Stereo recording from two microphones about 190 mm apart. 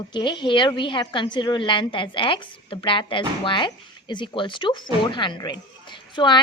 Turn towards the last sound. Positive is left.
turn(degrees=25)  # may be behind; listen again after turning